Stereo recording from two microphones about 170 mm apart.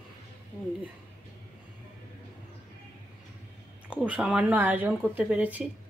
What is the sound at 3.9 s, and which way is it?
Speech, 10° right (ahead or behind).